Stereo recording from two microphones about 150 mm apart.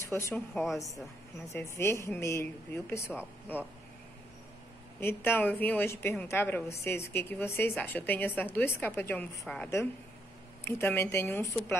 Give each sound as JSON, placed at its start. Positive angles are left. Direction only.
{"t": 0.0, "sound": "a woman's voice", "side_deg": 20}
{"t": 5.0, "sound": "a woman's voice", "side_deg": 15}